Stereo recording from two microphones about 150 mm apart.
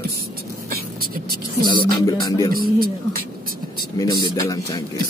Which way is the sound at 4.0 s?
20° left (ahead or behind).